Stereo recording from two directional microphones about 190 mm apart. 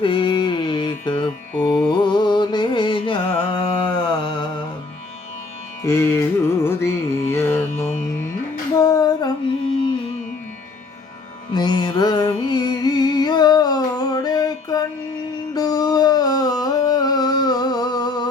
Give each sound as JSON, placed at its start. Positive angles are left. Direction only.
{"t": 0.0, "sound": "mantra", "side_deg": 25}
{"t": 1.5, "sound": "music", "side_deg": 5}
{"t": 2.0, "sound": "music", "side_deg": 25}
{"t": 5.8, "sound": "music", "side_deg": 15}
{"t": 8.7, "sound": "female singing", "side_deg": 20}
{"t": 11.5, "sound": "music", "side_deg": 20}
{"t": 15.5, "sound": "a sound", "side_deg": 20}